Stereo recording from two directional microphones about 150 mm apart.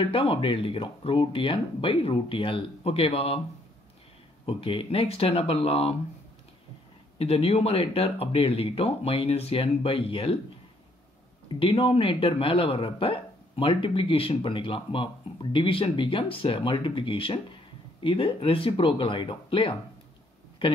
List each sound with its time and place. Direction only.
0.0 s speech: 40° left (ahead or behind)
4.5 s speech: 40° left (ahead or behind)
7.2 s speech: 40° left (ahead or behind)
11.6 s speech: 40° left (ahead or behind)